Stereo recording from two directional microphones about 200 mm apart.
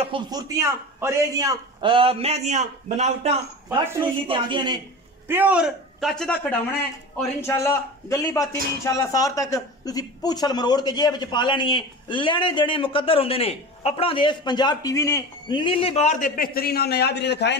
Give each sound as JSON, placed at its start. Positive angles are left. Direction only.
{"t": 0.0, "sound": "a man's voice", "side_deg": -25}
{"t": 4.0, "sound": "a man's voice", "side_deg": -25}
{"t": 5.3, "sound": "a man's voice", "side_deg": -10}
{"t": 7.4, "sound": "a man's voice", "side_deg": 15}